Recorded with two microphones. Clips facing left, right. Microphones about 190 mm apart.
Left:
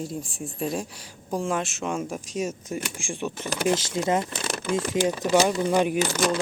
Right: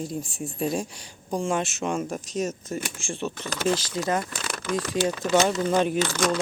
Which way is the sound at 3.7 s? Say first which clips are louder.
Left 2 dB; 25° left (ahead or behind).